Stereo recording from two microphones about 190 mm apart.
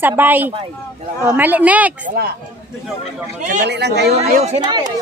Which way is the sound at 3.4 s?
45° right (ahead or behind).